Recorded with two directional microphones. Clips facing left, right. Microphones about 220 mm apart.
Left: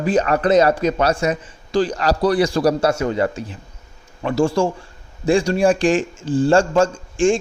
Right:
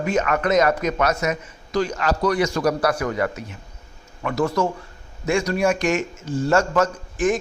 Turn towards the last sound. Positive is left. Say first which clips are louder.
# left 4 dB
turn(degrees=30)  # may be behind; listen again after turning